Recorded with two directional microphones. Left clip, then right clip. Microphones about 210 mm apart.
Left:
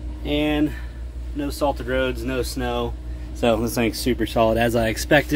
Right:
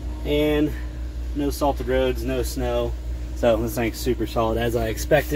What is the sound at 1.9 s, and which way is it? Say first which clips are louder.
Speech: right 1 dB; 20° left (ahead or behind).